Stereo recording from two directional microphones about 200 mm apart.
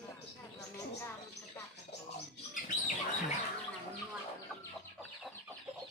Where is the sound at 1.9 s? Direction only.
60° left (ahead or behind).